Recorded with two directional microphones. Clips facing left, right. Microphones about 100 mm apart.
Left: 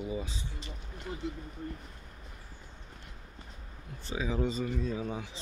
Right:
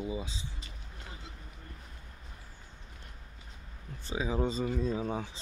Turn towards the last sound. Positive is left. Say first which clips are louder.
# right 2 dB
turn(degrees=-35)  # may be behind; listen again after turning